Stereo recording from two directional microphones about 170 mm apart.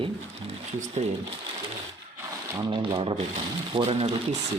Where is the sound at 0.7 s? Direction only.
45° right (ahead or behind).